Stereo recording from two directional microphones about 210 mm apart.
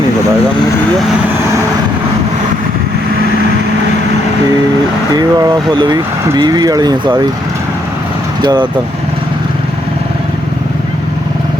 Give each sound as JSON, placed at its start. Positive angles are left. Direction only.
{"t": 5.1, "sound": "speech", "side_deg": -20}
{"t": 8.4, "sound": "speech", "side_deg": -20}